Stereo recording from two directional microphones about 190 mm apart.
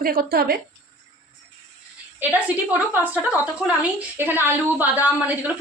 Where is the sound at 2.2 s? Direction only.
5° right (ahead or behind).